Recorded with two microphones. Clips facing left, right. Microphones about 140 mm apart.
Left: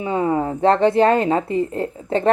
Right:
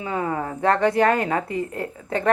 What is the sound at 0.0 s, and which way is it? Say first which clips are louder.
A woman's voice: left 6 dB; 25° left (ahead or behind).